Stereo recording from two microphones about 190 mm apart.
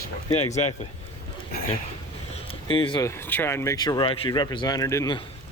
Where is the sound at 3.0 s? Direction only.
10° left (ahead or behind).